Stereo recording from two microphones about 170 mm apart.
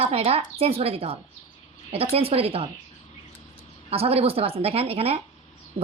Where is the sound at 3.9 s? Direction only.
35° right (ahead or behind).